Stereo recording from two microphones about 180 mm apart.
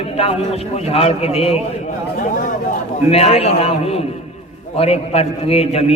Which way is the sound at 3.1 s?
35° left (ahead or behind).